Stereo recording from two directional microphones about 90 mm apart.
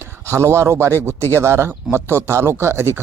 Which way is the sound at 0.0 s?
30° right (ahead or behind).